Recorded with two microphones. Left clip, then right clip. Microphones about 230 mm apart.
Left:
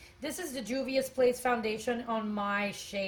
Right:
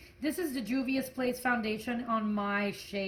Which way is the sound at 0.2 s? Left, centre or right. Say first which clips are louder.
Right 4 dB; left.